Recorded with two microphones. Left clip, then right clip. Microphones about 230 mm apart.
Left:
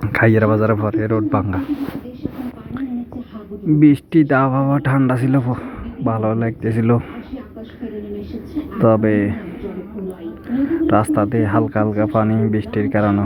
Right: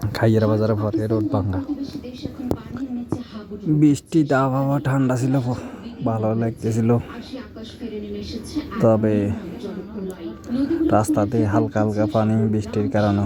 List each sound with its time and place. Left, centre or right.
0.1 s speech: left
3.8 s speech: centre
8.8 s speech: centre
10.8 s speech: centre